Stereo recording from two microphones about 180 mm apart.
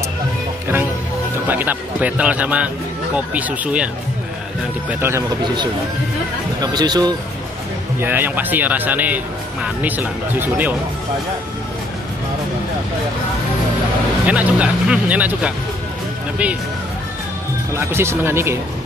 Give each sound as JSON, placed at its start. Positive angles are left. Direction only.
{"t": 1.5, "sound": "speech", "side_deg": -10}
{"t": 6.6, "sound": "speech", "side_deg": -20}
{"t": 8.0, "sound": "speech", "side_deg": -10}
{"t": 14.2, "sound": "speech", "side_deg": -5}
{"t": 17.7, "sound": "speech", "side_deg": -15}